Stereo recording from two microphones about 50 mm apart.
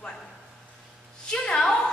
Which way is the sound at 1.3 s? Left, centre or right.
Left.